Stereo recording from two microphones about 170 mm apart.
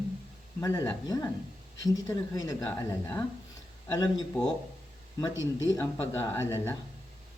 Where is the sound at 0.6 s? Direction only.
15° left (ahead or behind).